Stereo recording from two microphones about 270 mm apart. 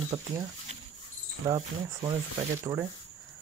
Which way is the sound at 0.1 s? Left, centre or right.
Centre.